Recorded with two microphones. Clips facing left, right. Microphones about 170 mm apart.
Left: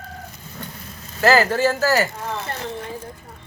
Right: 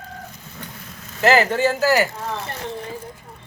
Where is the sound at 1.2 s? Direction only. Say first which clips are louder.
Even; 20° right (ahead or behind).